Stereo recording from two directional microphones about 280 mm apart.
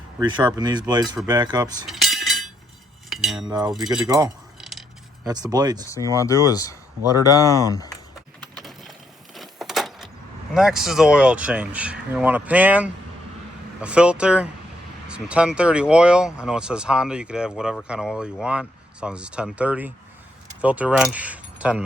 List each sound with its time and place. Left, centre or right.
0.2 s speech: centre
1.9 s chink: centre
3.1 s cutlery: centre
3.4 s speech: centre
3.7 s speech: centre
5.3 s speech: centre
6.1 s speech: centre
8.5 s a sound: centre
9.3 s keys jangling: centre
10.5 s speech: centre